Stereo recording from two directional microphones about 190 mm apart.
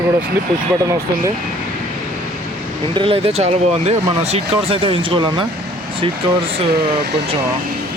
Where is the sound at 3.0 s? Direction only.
30° right (ahead or behind).